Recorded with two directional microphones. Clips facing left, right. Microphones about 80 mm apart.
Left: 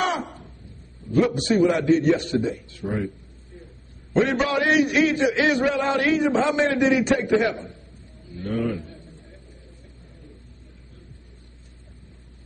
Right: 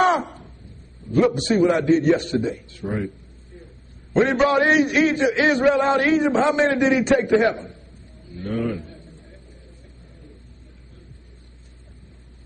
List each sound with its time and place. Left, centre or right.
0.0 s a sound: right
1.1 s a man's voice: right
4.1 s a man's voice: right